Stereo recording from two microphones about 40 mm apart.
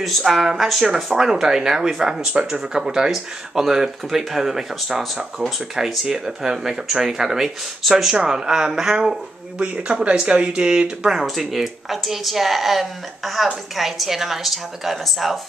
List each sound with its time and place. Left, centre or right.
0.0 s speech: centre
5.8 s speech: centre
9.6 s speech: right
11.2 s speech: centre